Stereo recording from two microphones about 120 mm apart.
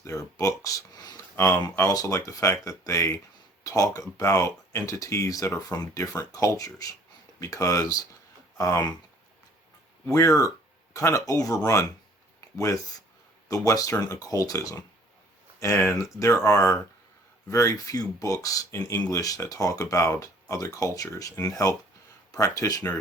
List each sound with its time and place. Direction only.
0.0 s speech: 25° left (ahead or behind)
10.1 s speech: 25° left (ahead or behind)
13.5 s speech: 25° left (ahead or behind)